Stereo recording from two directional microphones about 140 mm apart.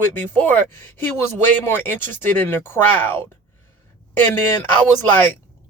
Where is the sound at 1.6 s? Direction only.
15° left (ahead or behind).